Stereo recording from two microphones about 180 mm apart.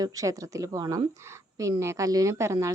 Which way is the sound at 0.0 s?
20° right (ahead or behind).